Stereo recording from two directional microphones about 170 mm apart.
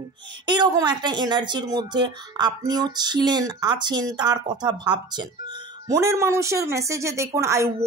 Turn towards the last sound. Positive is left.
turn(degrees=-15)  # may be behind; listen again after turning